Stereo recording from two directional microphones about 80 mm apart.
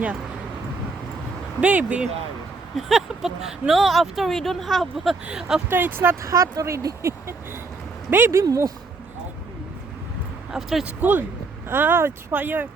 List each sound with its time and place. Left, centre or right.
1.6 s speech: centre
2.7 s speech: centre
5.6 s speech: right
6.2 s speech: right
10.5 s speech: centre
10.8 s speech: right